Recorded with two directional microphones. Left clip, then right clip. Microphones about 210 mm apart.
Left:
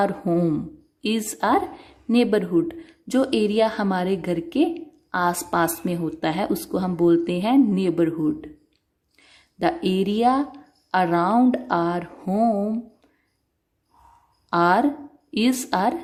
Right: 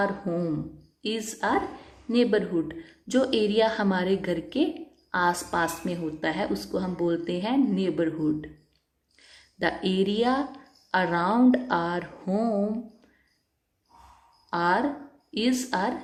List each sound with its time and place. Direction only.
0.0 s speech: 35° left (ahead or behind)
14.5 s speech: 35° left (ahead or behind)